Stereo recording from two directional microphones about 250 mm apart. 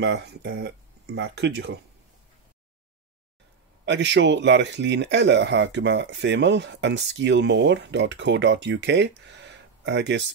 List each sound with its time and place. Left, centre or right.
0.0 s speech: right
3.8 s speech: right